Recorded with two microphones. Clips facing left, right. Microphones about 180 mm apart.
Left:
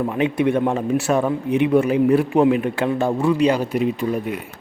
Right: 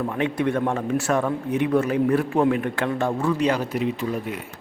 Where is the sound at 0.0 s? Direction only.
10° left (ahead or behind).